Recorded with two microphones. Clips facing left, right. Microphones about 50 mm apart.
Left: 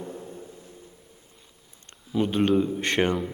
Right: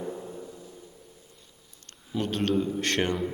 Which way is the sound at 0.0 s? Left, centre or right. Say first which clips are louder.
Right 2 dB; centre.